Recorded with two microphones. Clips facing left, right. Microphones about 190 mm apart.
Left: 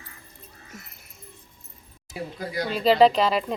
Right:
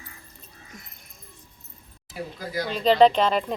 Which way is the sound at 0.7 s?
5° left (ahead or behind).